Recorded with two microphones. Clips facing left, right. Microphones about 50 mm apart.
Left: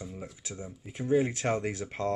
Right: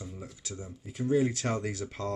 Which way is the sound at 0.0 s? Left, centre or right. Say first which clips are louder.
Left 2 dB; centre.